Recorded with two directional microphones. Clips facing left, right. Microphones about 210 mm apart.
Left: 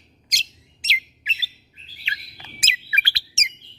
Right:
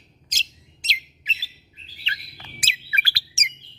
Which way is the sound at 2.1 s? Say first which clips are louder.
Even; 20° left (ahead or behind).